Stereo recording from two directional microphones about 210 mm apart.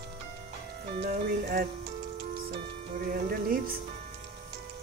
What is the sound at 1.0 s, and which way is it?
Speech, 45° right (ahead or behind).